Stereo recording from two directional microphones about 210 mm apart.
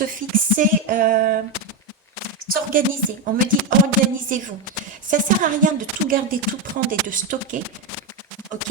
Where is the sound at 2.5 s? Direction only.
45° right (ahead or behind).